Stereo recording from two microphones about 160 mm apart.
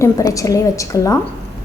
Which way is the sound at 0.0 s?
20° left (ahead or behind).